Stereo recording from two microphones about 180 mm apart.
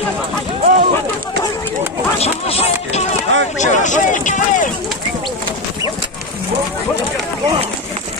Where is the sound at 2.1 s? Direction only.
35° left (ahead or behind).